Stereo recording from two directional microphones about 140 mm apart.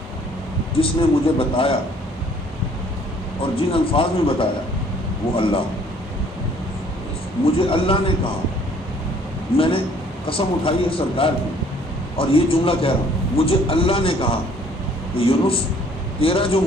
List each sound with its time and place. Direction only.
0.8 s a man's voice: 40° left (ahead or behind)
3.4 s a man's voice: 40° left (ahead or behind)
7.6 s a man's voice: 40° left (ahead or behind)
9.6 s a man's voice: 40° left (ahead or behind)